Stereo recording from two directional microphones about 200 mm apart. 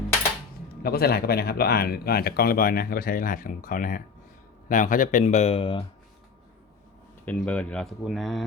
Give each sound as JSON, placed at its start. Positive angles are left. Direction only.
{"t": 0.8, "sound": "speech", "side_deg": 50}
{"t": 7.3, "sound": "speech", "side_deg": 5}